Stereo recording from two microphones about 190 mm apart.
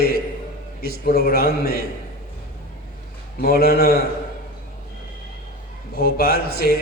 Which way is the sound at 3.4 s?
55° left (ahead or behind).